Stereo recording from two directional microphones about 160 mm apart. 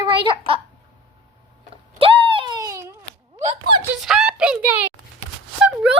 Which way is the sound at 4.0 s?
Centre (ahead or behind).